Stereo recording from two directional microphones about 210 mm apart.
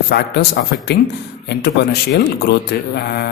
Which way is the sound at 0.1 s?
50° left (ahead or behind).